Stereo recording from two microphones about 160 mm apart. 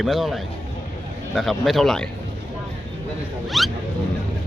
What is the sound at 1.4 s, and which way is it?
Speech, centre (ahead or behind).